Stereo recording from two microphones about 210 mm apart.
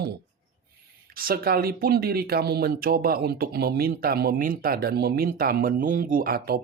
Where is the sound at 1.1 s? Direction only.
45° right (ahead or behind).